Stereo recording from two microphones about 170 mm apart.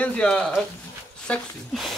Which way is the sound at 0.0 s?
5° left (ahead or behind).